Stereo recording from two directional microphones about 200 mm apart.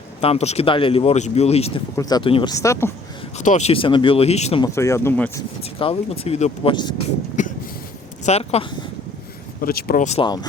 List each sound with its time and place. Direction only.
0.2 s speech: 30° left (ahead or behind)
2.0 s speech: 20° left (ahead or behind)
3.3 s speech: 35° left (ahead or behind)
4.6 s speech: 15° left (ahead or behind)
5.8 s speech: 30° left (ahead or behind)
7.4 s a sound: 40° left (ahead or behind)
8.2 s speech: 30° left (ahead or behind)
9.6 s speech: 50° left (ahead or behind)
10.2 s speech: 20° left (ahead or behind)